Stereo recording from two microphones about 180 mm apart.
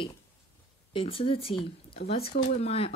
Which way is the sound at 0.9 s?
30° left (ahead or behind).